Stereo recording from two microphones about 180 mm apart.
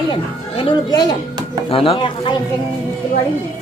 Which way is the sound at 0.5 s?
25° left (ahead or behind).